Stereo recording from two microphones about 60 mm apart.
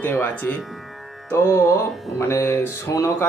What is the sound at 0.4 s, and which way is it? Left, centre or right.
Speech, left.